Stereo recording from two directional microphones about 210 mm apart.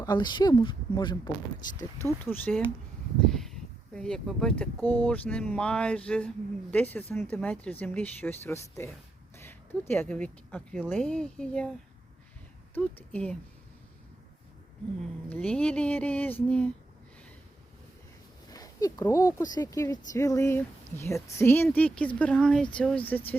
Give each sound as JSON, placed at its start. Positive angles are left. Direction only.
{"t": 0.0, "sound": "speech", "side_deg": 20}
{"t": 2.0, "sound": "speech", "side_deg": 10}
{"t": 12.7, "sound": "speech", "side_deg": 10}
{"t": 15.3, "sound": "speech", "side_deg": 5}
{"t": 18.5, "sound": "speech", "side_deg": 15}